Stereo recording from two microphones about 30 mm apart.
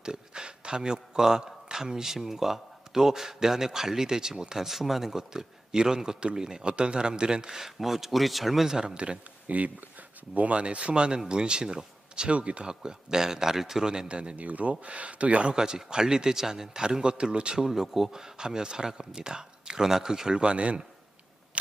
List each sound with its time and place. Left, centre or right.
0.0 s speech: right
4.6 s speech: centre; by 7.5 s right
7.8 s speech: centre
8.6 s speech: right
9.5 s speech: right
12.3 s speech: right
12.6 s speech: right
13.8 s speech: right
14.1 s speech: right
14.3 s speech: right
15.5 s speech: right
17.6 s speech: centre
18.2 s speech: right